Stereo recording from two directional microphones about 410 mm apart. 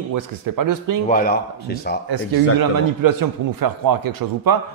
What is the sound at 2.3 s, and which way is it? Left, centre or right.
A man's voice, right.